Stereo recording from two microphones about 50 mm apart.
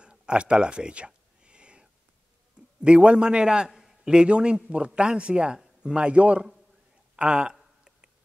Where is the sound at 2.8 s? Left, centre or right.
Right.